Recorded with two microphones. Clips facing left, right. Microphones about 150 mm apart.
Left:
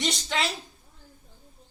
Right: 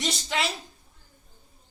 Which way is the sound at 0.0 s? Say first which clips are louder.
Even; 5° right (ahead or behind).